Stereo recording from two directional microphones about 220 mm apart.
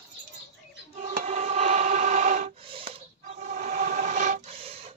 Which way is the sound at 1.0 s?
35° right (ahead or behind).